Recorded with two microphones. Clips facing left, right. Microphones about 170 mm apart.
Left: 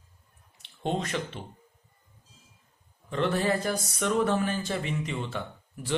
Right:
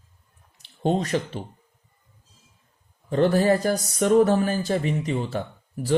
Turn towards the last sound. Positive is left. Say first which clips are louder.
# right 7 dB
turn(degrees=-40)  # may be behind; listen again after turning